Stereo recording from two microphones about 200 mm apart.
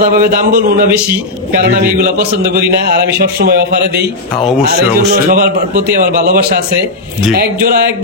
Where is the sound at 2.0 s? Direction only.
50° right (ahead or behind).